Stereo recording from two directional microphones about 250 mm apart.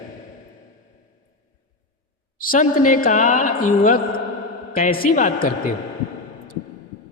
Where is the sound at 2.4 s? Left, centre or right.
Left.